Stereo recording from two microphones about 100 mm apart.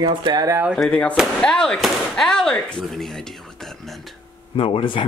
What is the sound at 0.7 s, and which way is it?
Speech, 10° left (ahead or behind).